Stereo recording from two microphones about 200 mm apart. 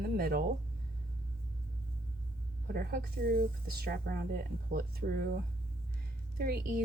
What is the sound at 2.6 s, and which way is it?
Speech, 50° right (ahead or behind).